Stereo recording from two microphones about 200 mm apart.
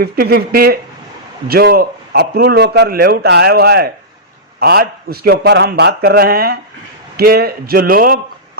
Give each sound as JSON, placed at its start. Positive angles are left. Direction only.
{"t": 0.0, "sound": "a man's voice", "side_deg": -50}